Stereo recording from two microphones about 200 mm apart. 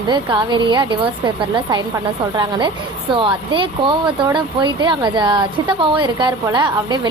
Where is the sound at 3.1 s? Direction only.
25° right (ahead or behind).